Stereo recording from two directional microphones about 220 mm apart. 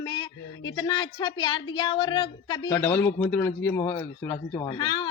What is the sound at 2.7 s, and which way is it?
A man's voice, 10° left (ahead or behind).